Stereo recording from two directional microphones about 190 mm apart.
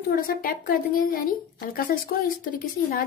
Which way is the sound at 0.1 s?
50° left (ahead or behind).